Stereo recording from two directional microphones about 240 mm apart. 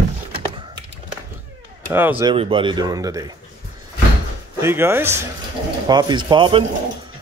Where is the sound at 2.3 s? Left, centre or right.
Right.